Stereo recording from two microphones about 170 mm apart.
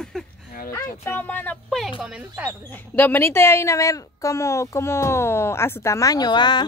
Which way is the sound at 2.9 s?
10° left (ahead or behind).